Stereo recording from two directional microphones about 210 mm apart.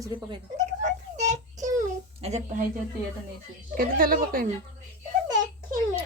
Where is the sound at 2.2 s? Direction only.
30° right (ahead or behind).